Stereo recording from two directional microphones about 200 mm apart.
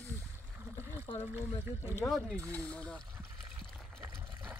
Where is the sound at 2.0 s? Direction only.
Centre (ahead or behind).